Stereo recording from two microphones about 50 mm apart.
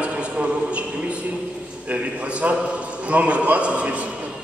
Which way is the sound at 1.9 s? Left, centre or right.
Right.